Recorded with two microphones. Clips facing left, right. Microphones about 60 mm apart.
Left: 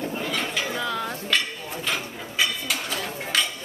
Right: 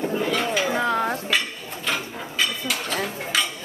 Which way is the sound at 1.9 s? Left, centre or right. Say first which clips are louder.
Right 3 dB; centre.